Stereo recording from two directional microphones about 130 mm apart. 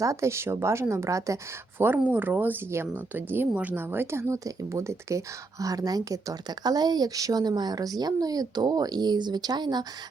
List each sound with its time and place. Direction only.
0.0 s a woman's voice: 25° right (ahead or behind)